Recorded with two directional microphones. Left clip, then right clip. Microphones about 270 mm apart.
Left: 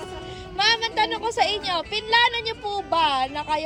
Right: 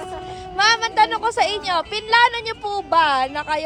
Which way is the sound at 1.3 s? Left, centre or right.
Centre.